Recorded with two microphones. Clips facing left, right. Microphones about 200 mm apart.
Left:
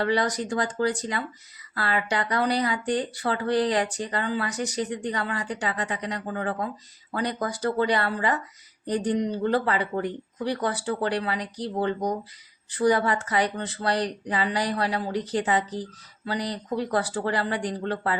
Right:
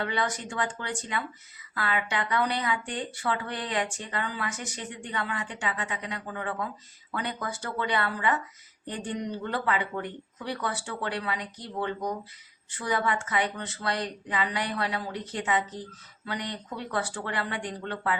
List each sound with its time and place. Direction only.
0.0 s speech: 35° left (ahead or behind)